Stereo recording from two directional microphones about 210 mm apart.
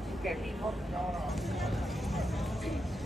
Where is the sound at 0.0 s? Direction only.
Centre (ahead or behind).